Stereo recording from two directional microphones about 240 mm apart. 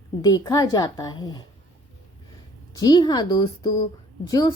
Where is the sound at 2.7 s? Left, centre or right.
Centre.